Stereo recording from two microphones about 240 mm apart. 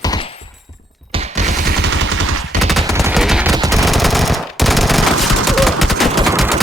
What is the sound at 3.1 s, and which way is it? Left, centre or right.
Machine gun, centre.